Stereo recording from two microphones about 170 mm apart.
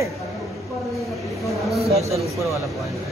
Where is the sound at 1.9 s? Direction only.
40° right (ahead or behind).